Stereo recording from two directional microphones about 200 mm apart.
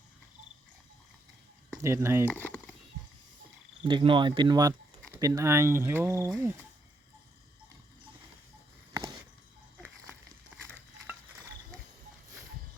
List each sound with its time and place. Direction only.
1.8 s speech: 15° right (ahead or behind)
2.3 s a sound: 5° left (ahead or behind)
3.8 s speech: 25° right (ahead or behind)